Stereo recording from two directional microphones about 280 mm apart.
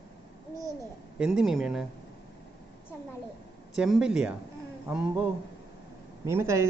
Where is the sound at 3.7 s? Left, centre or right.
Centre.